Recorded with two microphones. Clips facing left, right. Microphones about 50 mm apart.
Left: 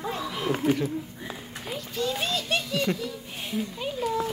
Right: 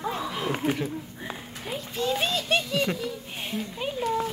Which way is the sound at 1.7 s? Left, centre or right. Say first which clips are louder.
Right 2 dB; right.